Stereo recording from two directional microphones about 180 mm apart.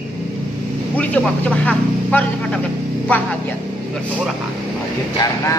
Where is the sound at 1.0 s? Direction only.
10° left (ahead or behind).